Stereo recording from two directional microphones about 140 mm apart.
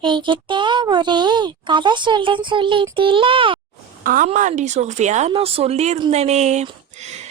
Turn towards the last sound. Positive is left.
turn(degrees=-50)  # may be behind; listen again after turning